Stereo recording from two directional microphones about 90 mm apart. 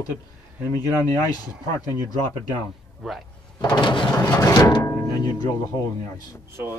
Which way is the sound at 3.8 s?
65° left (ahead or behind).